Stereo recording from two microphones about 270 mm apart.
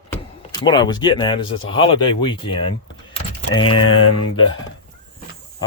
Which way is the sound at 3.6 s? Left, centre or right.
Left.